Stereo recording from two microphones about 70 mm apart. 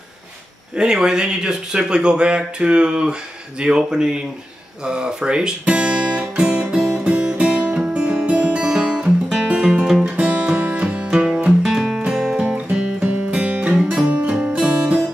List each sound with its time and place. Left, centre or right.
0.7 s speech: centre
4.8 s guitar: centre
9.3 s music: centre
10.0 s music: centre
12.4 s music: centre